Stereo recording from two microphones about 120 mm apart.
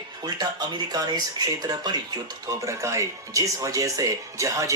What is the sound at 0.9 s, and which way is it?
Speech, 35° right (ahead or behind).